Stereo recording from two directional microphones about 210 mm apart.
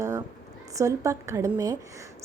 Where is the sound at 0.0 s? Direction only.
15° right (ahead or behind).